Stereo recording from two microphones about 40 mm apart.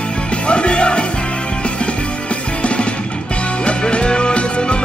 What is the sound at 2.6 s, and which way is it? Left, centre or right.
Music, left.